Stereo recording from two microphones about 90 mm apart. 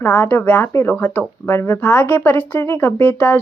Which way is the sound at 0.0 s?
20° left (ahead or behind).